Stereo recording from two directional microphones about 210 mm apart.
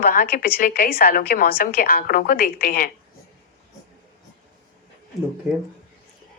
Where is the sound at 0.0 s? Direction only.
45° left (ahead or behind).